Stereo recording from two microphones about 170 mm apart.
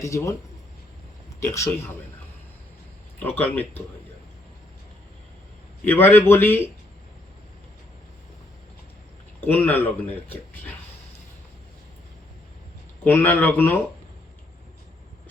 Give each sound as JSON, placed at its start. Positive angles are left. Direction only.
{"t": 0.0, "sound": "speech", "side_deg": 20}
{"t": 1.5, "sound": "speech", "side_deg": 15}
{"t": 3.2, "sound": "speech", "side_deg": 10}
{"t": 5.8, "sound": "speech", "side_deg": 10}
{"t": 9.4, "sound": "speech", "side_deg": 10}
{"t": 13.1, "sound": "speech", "side_deg": 10}